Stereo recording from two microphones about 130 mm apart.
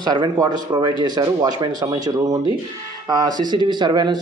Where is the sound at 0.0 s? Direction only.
35° right (ahead or behind).